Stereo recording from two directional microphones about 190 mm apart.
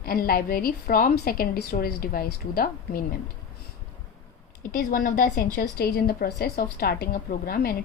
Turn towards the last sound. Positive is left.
turn(degrees=50)  # may be behind; listen again after turning